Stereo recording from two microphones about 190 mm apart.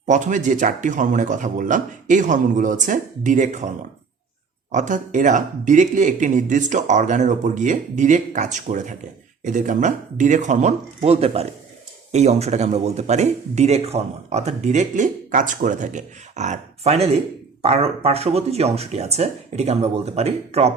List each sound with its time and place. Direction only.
0.0 s speech: 40° right (ahead or behind)
4.7 s speech: 40° right (ahead or behind)